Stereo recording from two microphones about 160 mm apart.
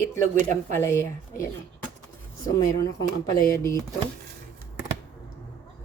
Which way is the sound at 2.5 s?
20° left (ahead or behind).